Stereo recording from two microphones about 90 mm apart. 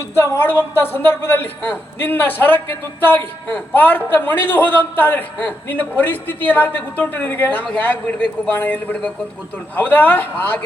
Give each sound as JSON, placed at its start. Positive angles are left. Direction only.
{"t": 0.1, "sound": "a man's voice", "side_deg": 30}